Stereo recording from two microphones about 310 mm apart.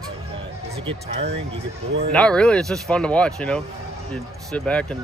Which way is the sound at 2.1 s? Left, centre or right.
Centre.